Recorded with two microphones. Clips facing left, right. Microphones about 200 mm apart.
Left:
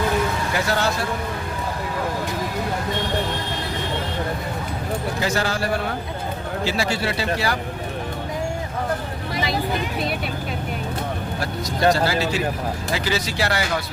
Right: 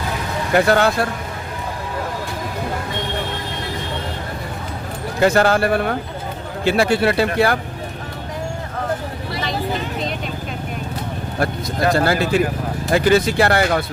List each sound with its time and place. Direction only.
0.5 s speech: 55° right (ahead or behind)
5.2 s speech: 55° right (ahead or behind)
9.3 s vehicle: 10° left (ahead or behind)
11.9 s speech: 55° right (ahead or behind)